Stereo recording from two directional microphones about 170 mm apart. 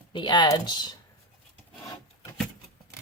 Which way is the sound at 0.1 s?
25° left (ahead or behind).